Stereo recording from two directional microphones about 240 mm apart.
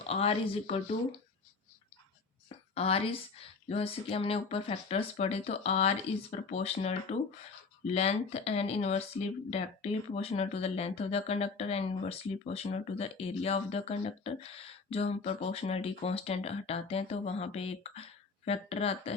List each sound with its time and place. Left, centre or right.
0.0 s speech: left
2.7 s speech: left